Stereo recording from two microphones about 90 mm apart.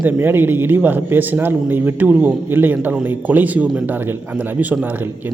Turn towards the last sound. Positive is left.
turn(degrees=-15)  # may be behind; listen again after turning